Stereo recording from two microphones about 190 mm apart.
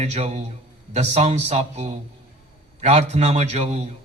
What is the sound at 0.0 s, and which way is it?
Speech, 35° right (ahead or behind).